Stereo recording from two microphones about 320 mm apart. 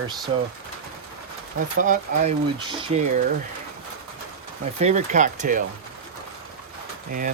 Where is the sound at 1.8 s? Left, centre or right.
Right.